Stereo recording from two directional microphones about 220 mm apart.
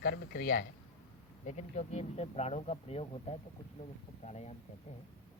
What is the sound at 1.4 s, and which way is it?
Speech, 30° left (ahead or behind).